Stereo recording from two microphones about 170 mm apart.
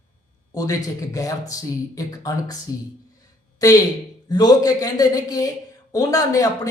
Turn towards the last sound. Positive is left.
turn(degrees=20)  # may be behind; listen again after turning